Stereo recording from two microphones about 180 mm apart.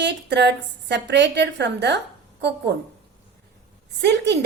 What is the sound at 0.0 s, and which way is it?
A woman's voice, 70° right (ahead or behind).